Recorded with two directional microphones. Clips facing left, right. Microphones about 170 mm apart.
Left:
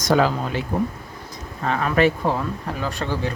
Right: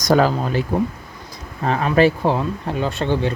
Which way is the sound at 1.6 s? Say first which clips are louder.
Right 3 dB; 35° right (ahead or behind).